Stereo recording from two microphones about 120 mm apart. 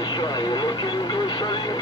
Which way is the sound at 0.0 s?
35° left (ahead or behind).